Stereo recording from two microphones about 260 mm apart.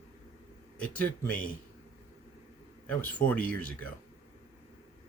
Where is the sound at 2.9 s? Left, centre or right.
Centre.